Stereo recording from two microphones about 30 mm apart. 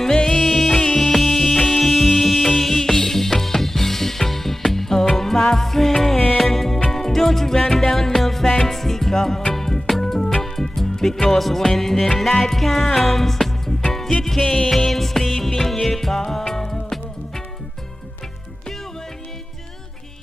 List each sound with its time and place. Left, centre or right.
0.0 s music: left
0.4 s music: centre
0.9 s music: centre
1.2 s music: centre
14.9 s music: centre